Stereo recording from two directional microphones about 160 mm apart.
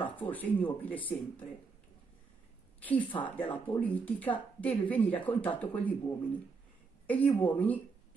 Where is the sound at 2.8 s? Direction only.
10° left (ahead or behind).